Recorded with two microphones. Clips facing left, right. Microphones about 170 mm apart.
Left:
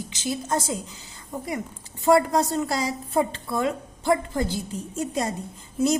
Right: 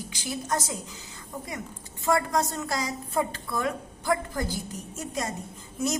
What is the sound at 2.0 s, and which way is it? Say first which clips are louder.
A woman's voice: left 6 dB; 30° left (ahead or behind).